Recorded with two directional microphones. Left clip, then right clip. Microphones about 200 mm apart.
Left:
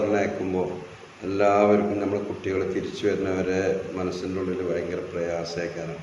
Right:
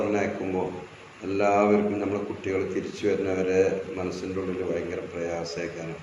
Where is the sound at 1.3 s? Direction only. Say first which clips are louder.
Left 2 dB; 10° left (ahead or behind).